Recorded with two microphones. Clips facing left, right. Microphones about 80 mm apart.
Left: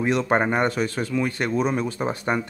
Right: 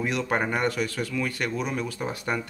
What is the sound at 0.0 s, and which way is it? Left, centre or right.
A man's voice, left.